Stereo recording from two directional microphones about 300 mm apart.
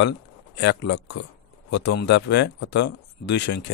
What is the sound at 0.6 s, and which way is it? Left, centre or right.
Speech, left.